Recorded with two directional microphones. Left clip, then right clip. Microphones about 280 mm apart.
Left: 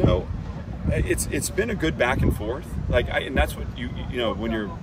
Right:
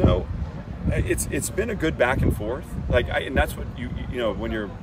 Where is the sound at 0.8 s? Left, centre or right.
Centre.